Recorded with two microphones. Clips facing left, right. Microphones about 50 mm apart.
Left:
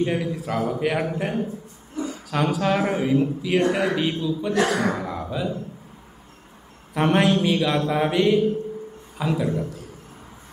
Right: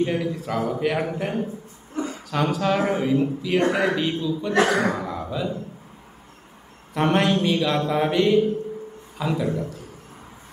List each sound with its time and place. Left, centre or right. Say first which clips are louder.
0.0 s mantra: even; centre
0.7 s a man's voice: even; centre
1.1 s mantra: left 1 dB; centre
2.0 s a sound: right 1 dB; right
2.3 s a man's voice: even; centre
2.9 s mantra: even; centre
3.9 s a man's voice: even; centre
4.6 s speech: right 1 dB; right
4.9 s speech: even; centre
6.9 s mantra: left 1 dB; centre